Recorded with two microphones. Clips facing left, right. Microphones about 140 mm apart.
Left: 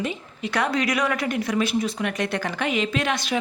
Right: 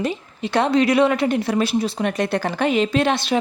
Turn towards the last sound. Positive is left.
turn(degrees=-30)  # may be behind; listen again after turning